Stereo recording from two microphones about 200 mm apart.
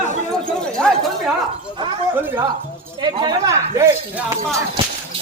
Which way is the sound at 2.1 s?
10° right (ahead or behind).